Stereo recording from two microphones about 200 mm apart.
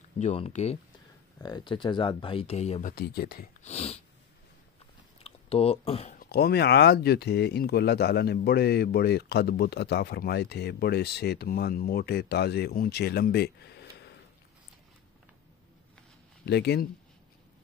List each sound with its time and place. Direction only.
0.2 s speech: 35° left (ahead or behind)
1.4 s speech: 20° left (ahead or behind)
2.9 s speech: 50° left (ahead or behind)
3.6 s speech: 30° left (ahead or behind)
5.2 s speech: 30° left (ahead or behind)
6.1 s speech: 50° left (ahead or behind)
16.4 s speech: 55° left (ahead or behind)